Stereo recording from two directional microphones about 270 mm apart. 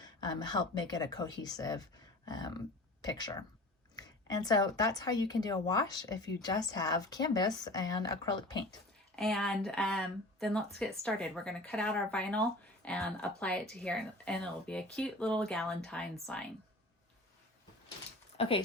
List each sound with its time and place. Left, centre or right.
0.0 s speech: centre
9.1 s speech: centre
18.3 s speech: left